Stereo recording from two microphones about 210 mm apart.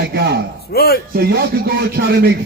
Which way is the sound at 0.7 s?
50° left (ahead or behind).